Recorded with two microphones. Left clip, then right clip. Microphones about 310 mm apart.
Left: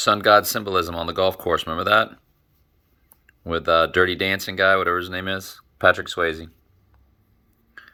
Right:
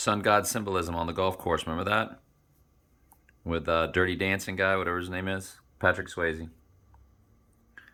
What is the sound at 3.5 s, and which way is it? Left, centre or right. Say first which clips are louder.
Speech: left 9 dB; centre.